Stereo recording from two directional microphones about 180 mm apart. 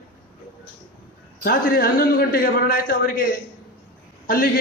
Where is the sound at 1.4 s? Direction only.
50° left (ahead or behind).